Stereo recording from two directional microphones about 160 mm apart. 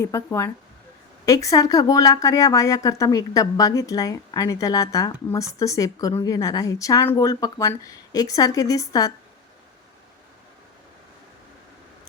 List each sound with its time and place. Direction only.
0.0 s speech: 15° left (ahead or behind)